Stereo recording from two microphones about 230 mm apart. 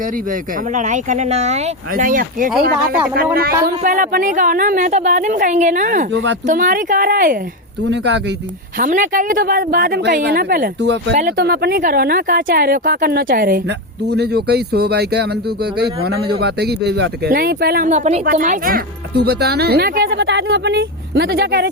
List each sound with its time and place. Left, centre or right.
0.7 s a woman's voice: right
3.8 s a woman's voice: right
7.9 s speech: right
8.8 s a woman's voice: right